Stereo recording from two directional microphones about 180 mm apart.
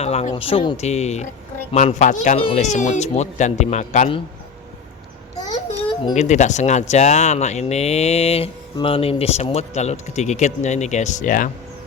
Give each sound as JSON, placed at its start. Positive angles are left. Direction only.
{"t": 0.0, "sound": "speech", "side_deg": 35}
{"t": 6.1, "sound": "speech", "side_deg": 40}